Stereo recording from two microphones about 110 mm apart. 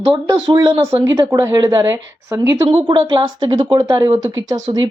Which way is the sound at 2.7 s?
45° right (ahead or behind).